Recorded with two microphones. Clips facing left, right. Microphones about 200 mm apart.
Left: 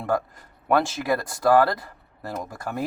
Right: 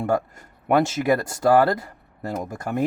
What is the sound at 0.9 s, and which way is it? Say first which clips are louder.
Speech: right 4 dB; 25° right (ahead or behind).